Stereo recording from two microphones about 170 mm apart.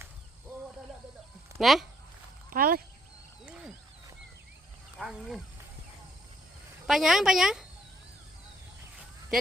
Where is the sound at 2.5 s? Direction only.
60° right (ahead or behind).